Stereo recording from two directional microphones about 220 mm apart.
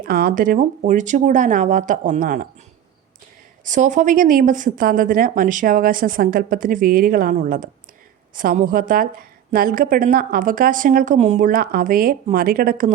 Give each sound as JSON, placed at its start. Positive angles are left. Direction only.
{"t": 0.0, "sound": "a woman's voice", "side_deg": -40}
{"t": 3.6, "sound": "a woman's voice", "side_deg": -35}